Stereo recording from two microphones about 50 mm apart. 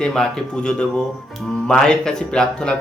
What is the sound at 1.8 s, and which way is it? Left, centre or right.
Speech, centre.